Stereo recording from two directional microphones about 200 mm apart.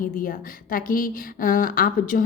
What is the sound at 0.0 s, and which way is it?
A woman's voice, 45° left (ahead or behind).